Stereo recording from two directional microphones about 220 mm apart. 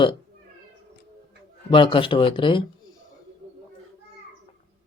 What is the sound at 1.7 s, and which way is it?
Speech, 20° left (ahead or behind).